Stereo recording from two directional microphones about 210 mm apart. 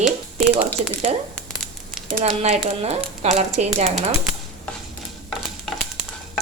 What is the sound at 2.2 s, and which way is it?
A woman's voice, 30° right (ahead or behind).